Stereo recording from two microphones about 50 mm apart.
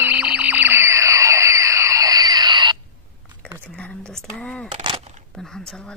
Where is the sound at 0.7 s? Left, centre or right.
Right.